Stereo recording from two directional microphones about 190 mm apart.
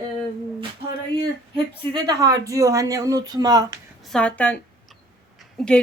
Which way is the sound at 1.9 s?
20° right (ahead or behind).